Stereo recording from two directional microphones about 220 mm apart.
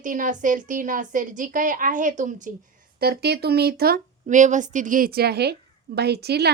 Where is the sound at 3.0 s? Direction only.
45° right (ahead or behind).